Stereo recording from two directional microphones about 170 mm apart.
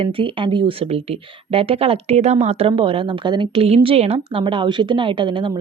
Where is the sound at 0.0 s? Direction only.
30° right (ahead or behind).